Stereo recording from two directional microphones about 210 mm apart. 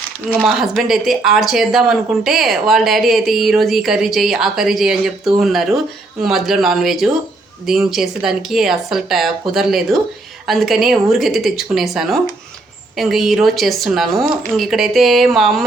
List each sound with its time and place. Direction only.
0.4 s speech: centre (ahead or behind)